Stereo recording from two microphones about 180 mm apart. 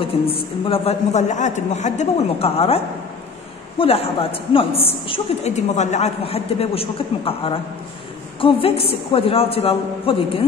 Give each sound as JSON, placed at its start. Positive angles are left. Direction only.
{"t": 0.0, "sound": "a woman's voice", "side_deg": 30}